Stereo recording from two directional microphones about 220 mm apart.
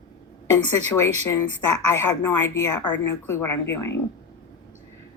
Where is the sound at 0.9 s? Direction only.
15° left (ahead or behind).